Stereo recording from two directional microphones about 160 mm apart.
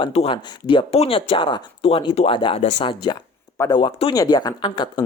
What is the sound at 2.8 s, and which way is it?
Speech, 30° left (ahead or behind).